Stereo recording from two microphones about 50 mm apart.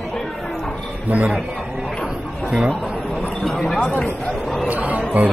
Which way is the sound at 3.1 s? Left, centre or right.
Centre.